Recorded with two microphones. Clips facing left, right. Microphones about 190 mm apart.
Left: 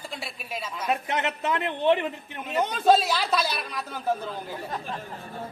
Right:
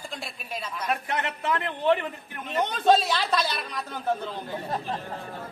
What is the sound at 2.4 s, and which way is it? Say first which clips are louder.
A woman's voice: left 1 dB; 5° left (ahead or behind).